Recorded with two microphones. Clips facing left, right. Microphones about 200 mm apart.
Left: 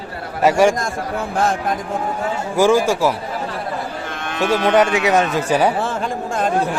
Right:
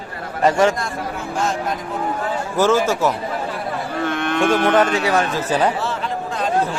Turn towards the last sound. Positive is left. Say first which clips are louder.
# left 3 dB
turn(degrees=50)  # may be behind; listen again after turning